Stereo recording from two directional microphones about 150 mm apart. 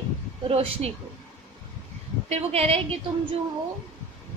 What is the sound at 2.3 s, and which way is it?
Speech, 40° right (ahead or behind).